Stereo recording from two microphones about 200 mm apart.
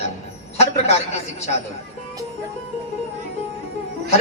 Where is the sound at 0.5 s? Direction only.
30° left (ahead or behind).